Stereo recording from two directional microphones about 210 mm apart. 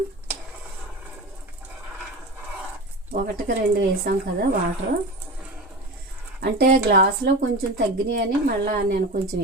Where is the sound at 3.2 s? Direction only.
45° right (ahead or behind).